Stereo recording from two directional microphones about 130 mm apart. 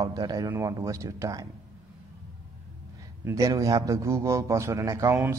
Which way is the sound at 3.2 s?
25° right (ahead or behind).